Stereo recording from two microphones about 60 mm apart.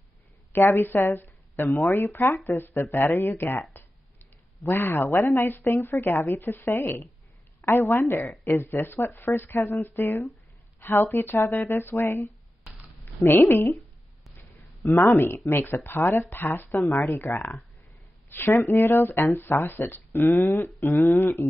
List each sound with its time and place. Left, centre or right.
0.5 s speech: left
4.6 s speech: left
5.6 s speech: left
5.9 s speech: left
13.5 s speech: left
13.7 s a sound: centre
14.9 s speech: left
16.9 s speech: left
19.4 s speech: left
20.6 s speech: left